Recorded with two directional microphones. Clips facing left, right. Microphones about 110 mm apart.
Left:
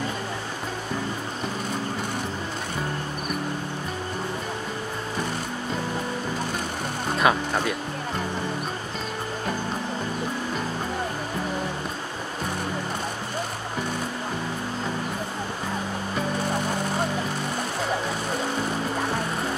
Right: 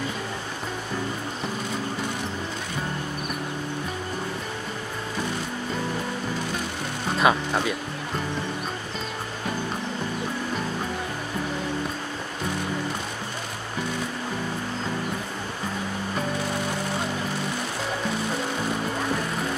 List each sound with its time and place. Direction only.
7.2 s speech: centre (ahead or behind)